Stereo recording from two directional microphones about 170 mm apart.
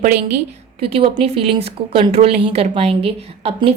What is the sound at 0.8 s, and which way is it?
A woman's voice, 35° right (ahead or behind).